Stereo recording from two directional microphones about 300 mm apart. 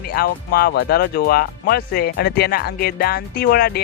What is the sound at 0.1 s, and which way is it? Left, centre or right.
Speech, left.